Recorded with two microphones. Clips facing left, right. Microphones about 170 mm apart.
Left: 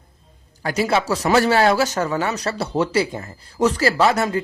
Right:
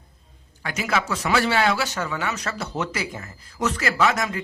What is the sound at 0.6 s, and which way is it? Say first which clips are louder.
Speech: left 6 dB; 35° left (ahead or behind).